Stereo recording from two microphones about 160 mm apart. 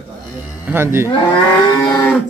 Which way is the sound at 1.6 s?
20° left (ahead or behind).